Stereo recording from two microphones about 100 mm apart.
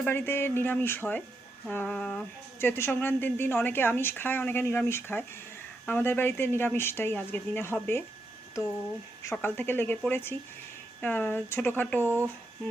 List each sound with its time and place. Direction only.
0.0 s a woman's voice: 25° left (ahead or behind)
1.7 s a sound: 15° left (ahead or behind)
2.6 s a woman's voice: 25° left (ahead or behind)
9.3 s a woman's voice: 20° left (ahead or behind)
12.0 s speech: 25° right (ahead or behind)